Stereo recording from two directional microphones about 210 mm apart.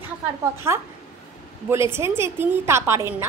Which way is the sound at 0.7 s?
10° right (ahead or behind).